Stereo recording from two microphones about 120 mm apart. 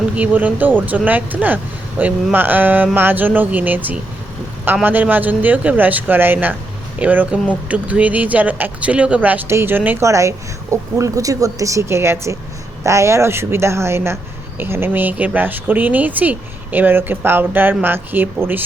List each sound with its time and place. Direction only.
0.2 s speech: 15° right (ahead or behind)